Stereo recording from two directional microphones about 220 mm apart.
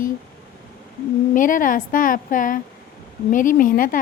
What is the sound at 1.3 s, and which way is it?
Speech, 35° left (ahead or behind).